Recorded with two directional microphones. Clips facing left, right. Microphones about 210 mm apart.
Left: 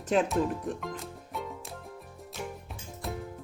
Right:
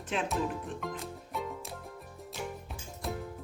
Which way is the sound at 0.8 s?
Centre (ahead or behind).